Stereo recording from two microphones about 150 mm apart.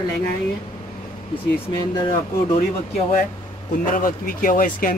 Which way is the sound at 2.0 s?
35° left (ahead or behind).